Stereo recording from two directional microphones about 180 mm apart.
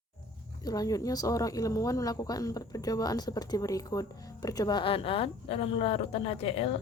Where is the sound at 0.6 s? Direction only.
20° left (ahead or behind).